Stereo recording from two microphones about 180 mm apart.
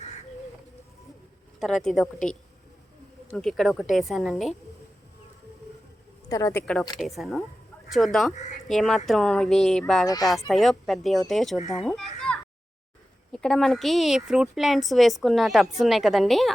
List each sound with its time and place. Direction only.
1.5 s speech: centre (ahead or behind)
3.2 s speech: 5° left (ahead or behind)
6.2 s speech: 20° left (ahead or behind)
7.0 s speech: centre (ahead or behind)
8.3 s speech: 40° left (ahead or behind)
8.6 s speech: centre (ahead or behind)
12.3 s a sound: 5° left (ahead or behind)
13.3 s speech: 5° left (ahead or behind)